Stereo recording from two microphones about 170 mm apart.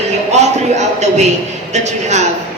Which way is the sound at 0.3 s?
40° right (ahead or behind).